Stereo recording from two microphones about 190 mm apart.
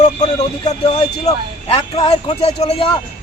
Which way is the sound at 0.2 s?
20° left (ahead or behind).